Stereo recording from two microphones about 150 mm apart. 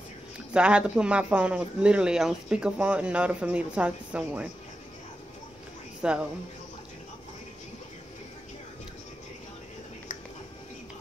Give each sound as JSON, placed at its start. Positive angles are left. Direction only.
{"t": 0.5, "sound": "speech", "side_deg": -5}
{"t": 6.0, "sound": "speech", "side_deg": -5}